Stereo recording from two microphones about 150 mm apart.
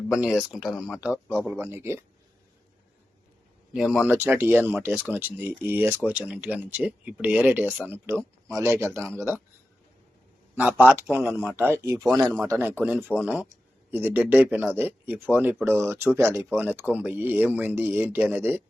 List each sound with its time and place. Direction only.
0.2 s speech: 5° right (ahead or behind)
1.5 s speech: 15° right (ahead or behind)
3.7 s speech: 5° right (ahead or behind)
9.0 s speech: centre (ahead or behind)
10.5 s speech: 10° right (ahead or behind)
12.2 s speech: centre (ahead or behind)
12.5 s speech: 15° right (ahead or behind)